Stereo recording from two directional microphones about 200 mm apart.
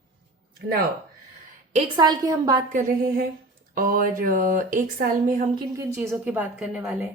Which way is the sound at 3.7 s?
45° right (ahead or behind).